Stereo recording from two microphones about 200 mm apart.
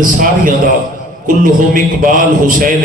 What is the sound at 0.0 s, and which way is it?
A man's voice, 40° right (ahead or behind).